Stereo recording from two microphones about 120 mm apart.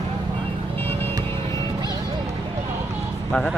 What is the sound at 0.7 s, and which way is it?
Music, 20° left (ahead or behind).